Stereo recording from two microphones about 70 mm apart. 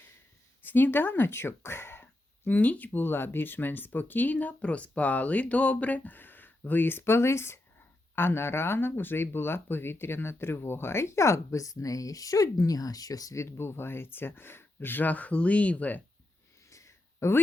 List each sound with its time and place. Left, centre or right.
0.6 s speech: left
13.4 s speech: left
16.6 s a sound: left